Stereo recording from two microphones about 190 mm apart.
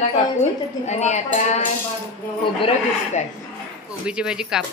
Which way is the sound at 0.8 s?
35° left (ahead or behind).